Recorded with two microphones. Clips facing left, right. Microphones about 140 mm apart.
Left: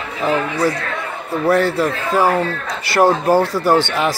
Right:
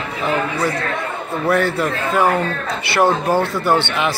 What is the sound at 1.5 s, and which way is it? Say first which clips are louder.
Speech: left 2 dB; 35° left (ahead or behind).